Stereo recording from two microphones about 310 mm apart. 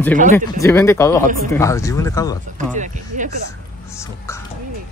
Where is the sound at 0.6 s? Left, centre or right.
Centre.